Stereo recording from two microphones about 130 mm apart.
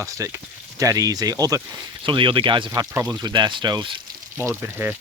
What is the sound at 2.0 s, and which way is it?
Speech, 40° right (ahead or behind).